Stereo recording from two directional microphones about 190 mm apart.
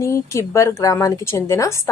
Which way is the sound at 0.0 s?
15° left (ahead or behind).